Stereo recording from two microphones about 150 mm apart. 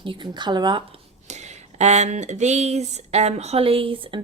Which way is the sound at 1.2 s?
50° right (ahead or behind).